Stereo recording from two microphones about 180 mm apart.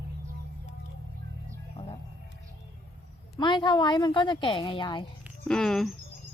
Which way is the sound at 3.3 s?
25° left (ahead or behind).